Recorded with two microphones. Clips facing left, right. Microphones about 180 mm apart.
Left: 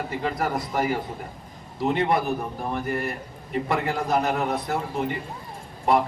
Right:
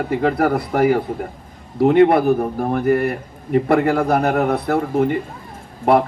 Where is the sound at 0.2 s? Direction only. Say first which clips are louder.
Right 8 dB; 60° right (ahead or behind).